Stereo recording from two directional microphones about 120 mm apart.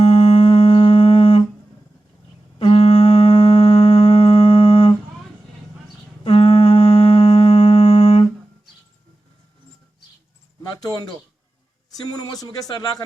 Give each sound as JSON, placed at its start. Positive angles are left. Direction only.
{"t": 0.0, "sound": "music", "side_deg": 55}
{"t": 2.6, "sound": "music", "side_deg": 55}
{"t": 6.2, "sound": "humming", "side_deg": 50}
{"t": 10.8, "sound": "speech", "side_deg": 30}